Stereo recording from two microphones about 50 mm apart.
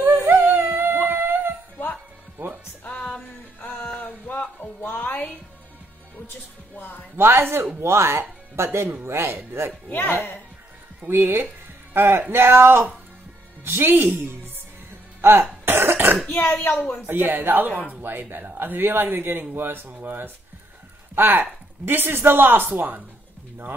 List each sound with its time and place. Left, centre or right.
0.0 s music: right
0.4 s humming: right
2.4 s music: right
3.6 s music: left
7.2 s speech: right
7.8 s speech: right
9.8 s speech: left
11.1 s speech: right
15.6 s cough: right
17.0 s speech: right